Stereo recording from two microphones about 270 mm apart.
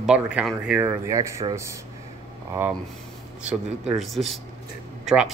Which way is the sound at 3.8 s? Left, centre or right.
Centre.